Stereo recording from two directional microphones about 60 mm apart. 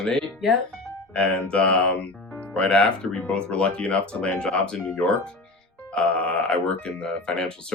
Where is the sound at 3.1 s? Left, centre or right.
Left.